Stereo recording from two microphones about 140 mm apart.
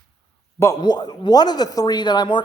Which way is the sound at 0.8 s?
30° left (ahead or behind).